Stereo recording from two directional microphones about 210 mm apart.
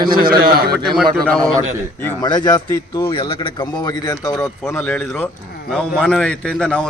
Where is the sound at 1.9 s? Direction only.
15° left (ahead or behind).